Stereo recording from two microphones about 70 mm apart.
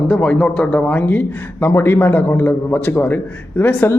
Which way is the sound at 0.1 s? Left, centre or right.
Centre.